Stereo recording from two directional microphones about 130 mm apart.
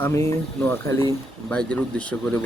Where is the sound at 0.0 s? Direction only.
20° left (ahead or behind).